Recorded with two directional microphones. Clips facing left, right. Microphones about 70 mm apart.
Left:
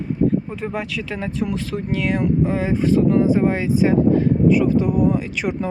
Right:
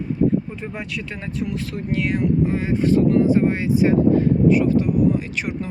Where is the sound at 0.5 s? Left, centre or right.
Left.